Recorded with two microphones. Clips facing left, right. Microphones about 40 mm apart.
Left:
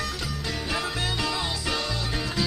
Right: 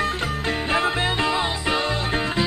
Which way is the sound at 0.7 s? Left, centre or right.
Right.